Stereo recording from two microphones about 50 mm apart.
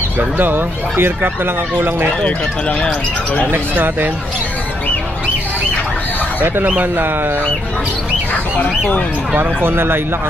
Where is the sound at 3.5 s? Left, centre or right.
Right.